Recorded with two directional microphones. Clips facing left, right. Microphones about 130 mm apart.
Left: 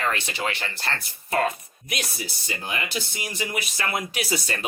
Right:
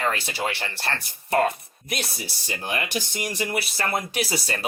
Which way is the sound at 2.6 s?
55° right (ahead or behind).